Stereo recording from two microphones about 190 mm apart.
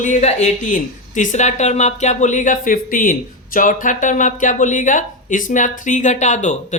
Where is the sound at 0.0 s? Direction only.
40° left (ahead or behind).